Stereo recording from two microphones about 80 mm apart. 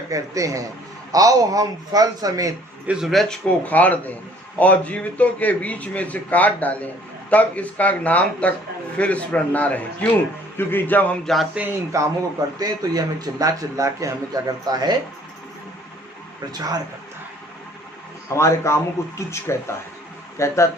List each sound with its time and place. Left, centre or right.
0.1 s speech: right
2.8 s speech: centre
3.1 s speech: centre
3.6 s a man's voice: centre
11.6 s speech: centre
11.9 s speech: right
12.5 s speech: right
16.5 s speech: right
18.3 s speech: left